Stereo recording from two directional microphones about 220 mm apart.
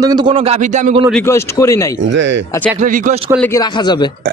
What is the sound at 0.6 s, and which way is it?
Speech, 35° right (ahead or behind).